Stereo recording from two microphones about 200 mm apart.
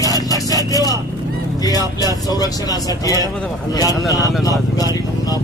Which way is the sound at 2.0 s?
20° left (ahead or behind).